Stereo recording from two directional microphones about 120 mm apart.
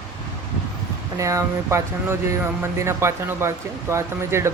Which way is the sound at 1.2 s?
25° right (ahead or behind).